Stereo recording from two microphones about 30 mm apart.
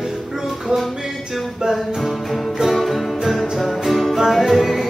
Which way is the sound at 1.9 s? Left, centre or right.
Centre.